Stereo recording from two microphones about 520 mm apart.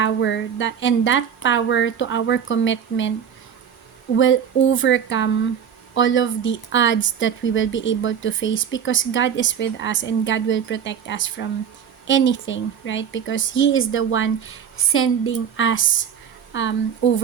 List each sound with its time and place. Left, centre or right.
0.0 s speech: left
4.2 s a woman's voice: left